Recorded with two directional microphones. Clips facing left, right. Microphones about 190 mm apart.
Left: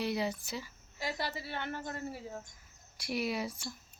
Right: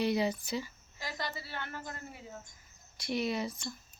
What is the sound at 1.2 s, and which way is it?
Speech, 20° left (ahead or behind).